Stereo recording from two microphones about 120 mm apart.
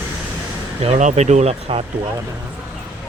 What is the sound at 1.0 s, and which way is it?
Speech, 80° right.